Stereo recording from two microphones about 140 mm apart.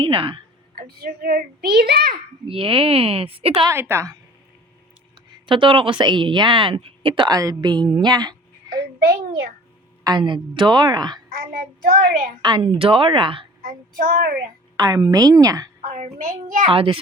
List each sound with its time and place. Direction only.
0.0 s a woman's voice: 40° right (ahead or behind)
0.8 s a child's voice: 90° right
2.5 s speech: 40° right (ahead or behind)
3.7 s a woman's voice: 20° right (ahead or behind)
5.3 s a woman's voice: 35° right (ahead or behind)
10.0 s a woman's voice: 30° right (ahead or behind)
11.3 s a child's voice: 90° right
12.4 s a woman's voice: 35° right (ahead or behind)
13.6 s speech: 80° right
14.8 s a woman's voice: 25° right (ahead or behind)
15.8 s a child's voice: 55° right (ahead or behind); by 16.6 s 75° right (ahead or behind)
16.7 s a woman's voice: 35° right (ahead or behind)